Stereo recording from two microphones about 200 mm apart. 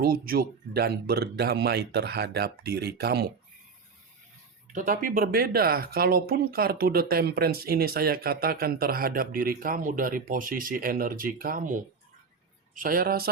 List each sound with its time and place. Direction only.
0.0 s speech: 50° right (ahead or behind)
4.7 s speech: 40° right (ahead or behind)